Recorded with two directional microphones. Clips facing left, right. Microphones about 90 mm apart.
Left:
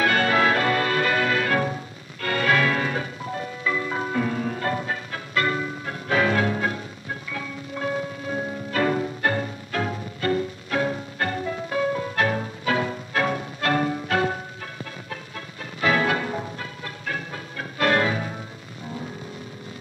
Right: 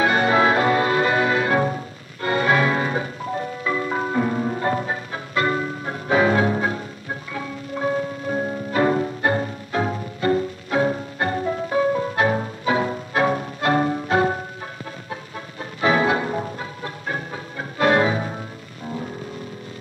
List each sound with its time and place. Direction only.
0.0 s music: 20° right (ahead or behind)